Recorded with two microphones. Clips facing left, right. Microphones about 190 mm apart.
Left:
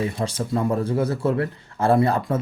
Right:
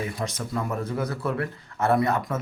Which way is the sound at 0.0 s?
30° left (ahead or behind).